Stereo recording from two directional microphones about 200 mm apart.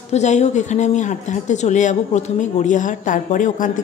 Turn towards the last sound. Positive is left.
turn(degrees=40)  # may be behind; listen again after turning